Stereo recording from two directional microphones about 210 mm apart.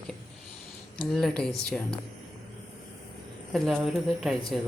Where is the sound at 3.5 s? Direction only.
Centre (ahead or behind).